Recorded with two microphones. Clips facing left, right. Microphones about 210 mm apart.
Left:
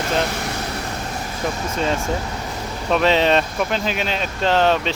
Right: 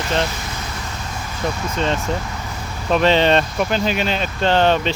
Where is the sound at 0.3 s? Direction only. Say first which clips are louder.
Left 4 dB; 60° left (ahead or behind).